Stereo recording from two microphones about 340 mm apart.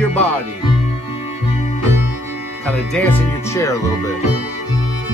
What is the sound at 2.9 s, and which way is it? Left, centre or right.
Speech, centre.